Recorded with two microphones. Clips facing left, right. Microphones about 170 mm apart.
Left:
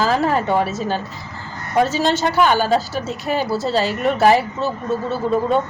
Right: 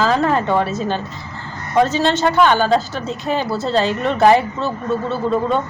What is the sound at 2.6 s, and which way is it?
A woman's voice, 5° left (ahead or behind).